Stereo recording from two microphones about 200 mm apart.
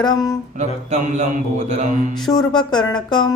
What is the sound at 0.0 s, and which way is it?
Speech, 20° left (ahead or behind).